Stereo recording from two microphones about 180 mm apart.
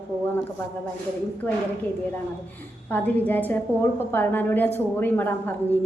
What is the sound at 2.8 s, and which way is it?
A woman's voice, 10° left (ahead or behind).